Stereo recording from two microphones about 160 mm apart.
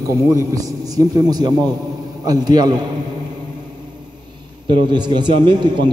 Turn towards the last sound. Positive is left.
turn(degrees=-30)  # may be behind; listen again after turning